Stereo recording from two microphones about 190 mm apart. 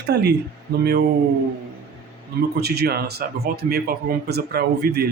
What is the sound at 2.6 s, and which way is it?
A man's voice, 55° right (ahead or behind).